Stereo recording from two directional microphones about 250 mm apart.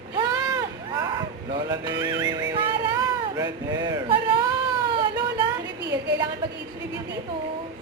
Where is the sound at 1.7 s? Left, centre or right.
Centre.